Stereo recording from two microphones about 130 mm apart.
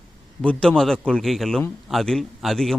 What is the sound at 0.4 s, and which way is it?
A man's voice, 5° left (ahead or behind).